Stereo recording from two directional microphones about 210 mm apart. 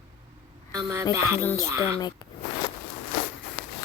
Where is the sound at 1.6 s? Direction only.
15° right (ahead or behind).